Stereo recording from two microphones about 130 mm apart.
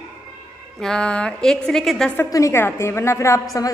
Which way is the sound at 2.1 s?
20° left (ahead or behind).